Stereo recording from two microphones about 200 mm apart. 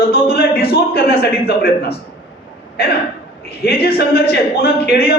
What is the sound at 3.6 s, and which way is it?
A man's voice, 50° left (ahead or behind).